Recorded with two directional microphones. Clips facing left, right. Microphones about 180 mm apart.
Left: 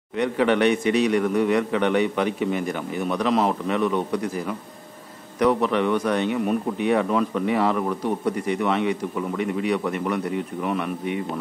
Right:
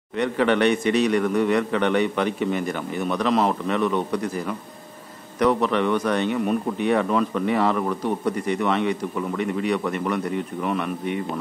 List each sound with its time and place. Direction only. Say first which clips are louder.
0.1 s speech: even; 10° left (ahead or behind)